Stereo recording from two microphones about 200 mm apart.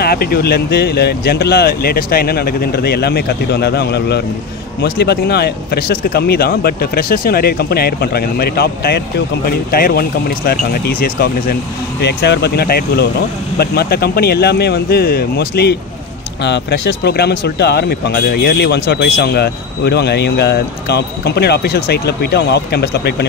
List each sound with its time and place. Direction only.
0.0 s speech: 50° left (ahead or behind)
12.0 s speech: 60° left (ahead or behind)